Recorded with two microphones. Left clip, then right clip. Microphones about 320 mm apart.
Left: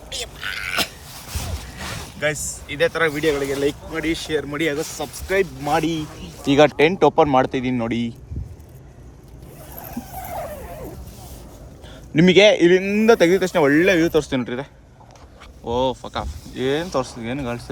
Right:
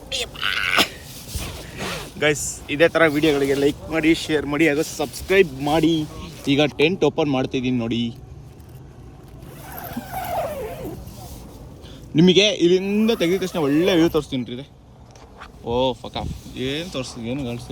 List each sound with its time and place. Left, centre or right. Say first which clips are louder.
0.1 s creak: right 5 dB; centre
1.8 s speech: right 2 dB; centre
10.2 s vehicle: right 6 dB; centre
12.1 s speech: left 3 dB; centre
14.4 s speech: left 6 dB; centre
15.4 s speech: even; centre
16.6 s speech: left 6 dB; left